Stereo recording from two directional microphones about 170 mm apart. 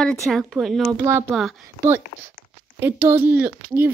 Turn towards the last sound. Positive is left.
turn(degrees=-10)  # may be behind; listen again after turning